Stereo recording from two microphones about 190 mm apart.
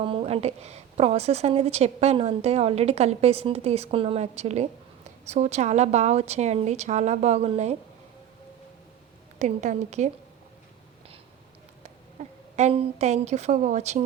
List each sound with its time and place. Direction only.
0.0 s a woman's voice: 30° right (ahead or behind)
9.4 s a woman's voice: 35° right (ahead or behind)
12.2 s a sound: 35° right (ahead or behind)
12.5 s a woman's voice: 35° right (ahead or behind)